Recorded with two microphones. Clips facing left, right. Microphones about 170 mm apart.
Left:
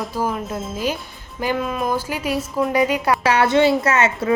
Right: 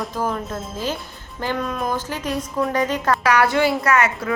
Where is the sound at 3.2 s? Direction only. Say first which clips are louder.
Left 3 dB; 25° left (ahead or behind).